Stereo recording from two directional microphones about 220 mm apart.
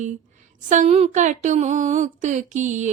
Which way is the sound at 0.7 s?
30° right (ahead or behind).